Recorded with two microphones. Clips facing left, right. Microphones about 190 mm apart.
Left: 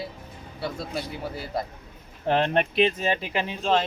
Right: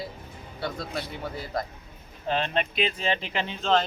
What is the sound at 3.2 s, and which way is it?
Speech, 10° left (ahead or behind).